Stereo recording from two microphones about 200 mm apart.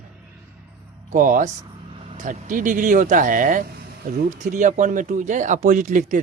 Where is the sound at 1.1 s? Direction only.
40° right (ahead or behind).